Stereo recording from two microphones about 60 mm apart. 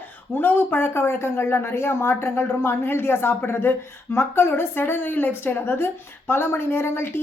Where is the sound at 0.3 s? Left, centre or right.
Left.